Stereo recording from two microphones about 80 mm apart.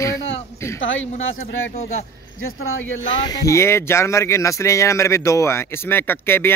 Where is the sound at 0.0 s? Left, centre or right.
Left.